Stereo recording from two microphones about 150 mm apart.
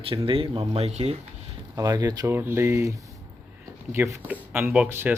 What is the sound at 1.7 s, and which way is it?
Speech, 25° right (ahead or behind).